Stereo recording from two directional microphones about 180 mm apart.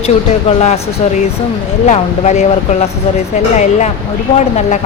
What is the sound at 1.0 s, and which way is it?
Speech, 40° left (ahead or behind).